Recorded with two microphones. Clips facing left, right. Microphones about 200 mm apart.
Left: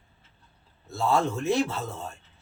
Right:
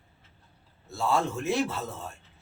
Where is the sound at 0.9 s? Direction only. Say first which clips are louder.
Left 2 dB; centre (ahead or behind).